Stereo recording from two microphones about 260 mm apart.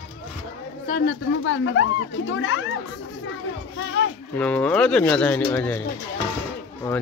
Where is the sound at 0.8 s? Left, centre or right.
Left.